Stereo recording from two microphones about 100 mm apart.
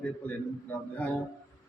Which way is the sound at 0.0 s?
15° left (ahead or behind).